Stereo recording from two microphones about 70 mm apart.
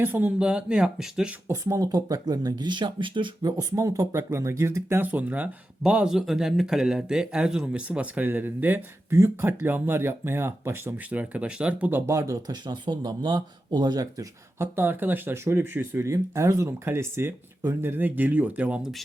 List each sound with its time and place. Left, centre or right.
0.0 s speech: right
1.6 s speech: right
2.7 s speech: right
3.4 s speech: right
3.8 s speech: right
4.9 s speech: right
6.1 s speech: centre; by 8.8 s right
9.0 s speech: right
10.9 s speech: right
12.0 s speech: right
12.5 s speech: right
14.6 s speech: right
16.0 s speech: right; by 18.8 s centre
18.8 s speech: centre